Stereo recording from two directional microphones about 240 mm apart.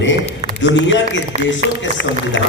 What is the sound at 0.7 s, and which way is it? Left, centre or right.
Speech, left.